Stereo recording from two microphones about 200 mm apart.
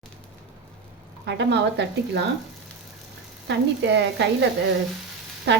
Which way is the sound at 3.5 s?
60° right (ahead or behind).